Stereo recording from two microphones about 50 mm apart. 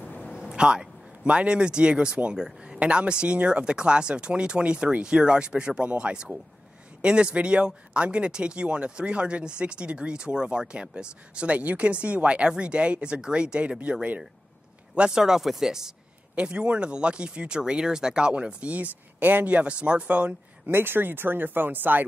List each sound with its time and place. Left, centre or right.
0.3 s a man's voice: centre
15.0 s speech: centre
16.3 s speech: right
20.6 s speech: right